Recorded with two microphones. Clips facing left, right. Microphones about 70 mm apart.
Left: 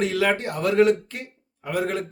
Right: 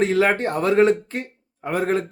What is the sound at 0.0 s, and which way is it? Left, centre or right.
Speech, right.